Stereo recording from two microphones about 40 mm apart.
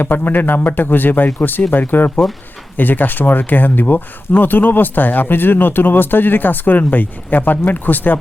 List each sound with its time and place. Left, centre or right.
0.0 s speech: left